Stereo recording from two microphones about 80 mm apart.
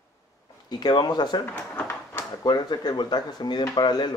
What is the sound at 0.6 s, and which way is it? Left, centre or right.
Speech, left.